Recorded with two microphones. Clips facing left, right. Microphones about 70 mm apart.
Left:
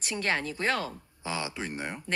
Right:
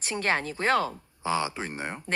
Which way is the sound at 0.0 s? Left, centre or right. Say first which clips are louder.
Right 2 dB; right.